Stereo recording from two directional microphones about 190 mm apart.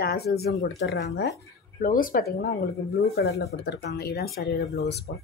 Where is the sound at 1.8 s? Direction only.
45° left (ahead or behind).